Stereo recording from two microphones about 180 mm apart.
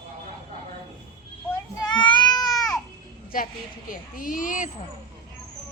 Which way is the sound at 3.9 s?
50° left (ahead or behind).